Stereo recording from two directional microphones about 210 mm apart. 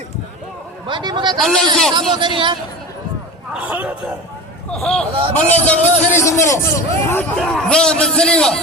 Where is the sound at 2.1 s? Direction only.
20° right (ahead or behind).